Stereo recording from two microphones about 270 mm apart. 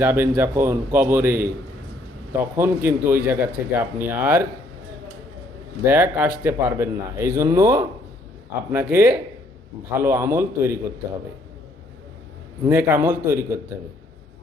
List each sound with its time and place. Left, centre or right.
0.0 s speech: centre
5.8 s speech: centre
12.6 s speech: centre